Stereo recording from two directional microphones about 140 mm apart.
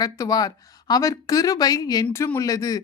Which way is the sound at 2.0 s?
15° left (ahead or behind).